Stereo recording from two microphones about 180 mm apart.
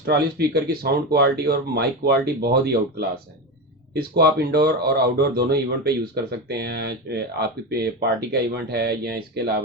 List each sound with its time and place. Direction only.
0.0 s speech: 60° right (ahead or behind)